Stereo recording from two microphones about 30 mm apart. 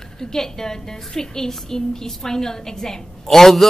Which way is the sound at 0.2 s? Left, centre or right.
Centre.